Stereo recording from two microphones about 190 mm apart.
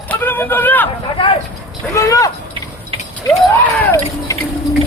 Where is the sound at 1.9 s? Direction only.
15° left (ahead or behind).